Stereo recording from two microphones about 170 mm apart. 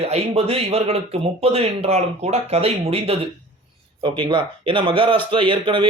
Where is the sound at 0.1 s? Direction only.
35° right (ahead or behind).